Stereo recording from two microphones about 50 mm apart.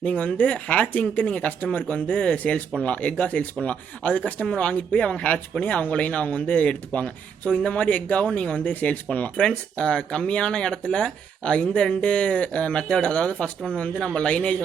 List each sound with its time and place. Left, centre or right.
0.0 s speech: left
9.4 s speech: centre